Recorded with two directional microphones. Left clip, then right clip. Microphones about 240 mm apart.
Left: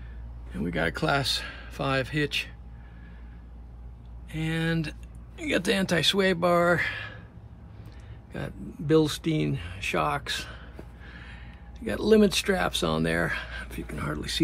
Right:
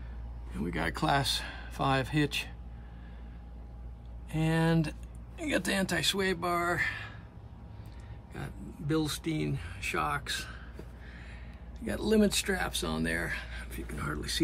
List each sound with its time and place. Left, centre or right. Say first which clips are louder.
0.5 s speech: left 5 dB; centre
4.3 s speech: even; centre
8.3 s speech: left 7 dB; centre
11.1 s gasp: left 5 dB; centre
11.8 s speech: left 7 dB; centre